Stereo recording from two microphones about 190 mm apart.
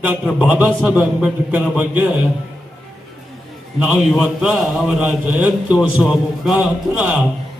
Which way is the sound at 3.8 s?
5° right (ahead or behind).